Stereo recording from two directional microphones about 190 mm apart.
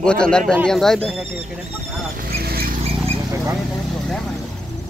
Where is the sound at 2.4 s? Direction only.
55° right (ahead or behind).